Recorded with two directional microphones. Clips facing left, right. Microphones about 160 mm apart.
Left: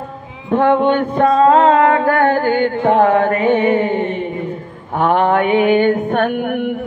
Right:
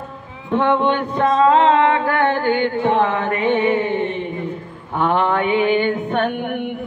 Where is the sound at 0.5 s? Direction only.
45° left (ahead or behind).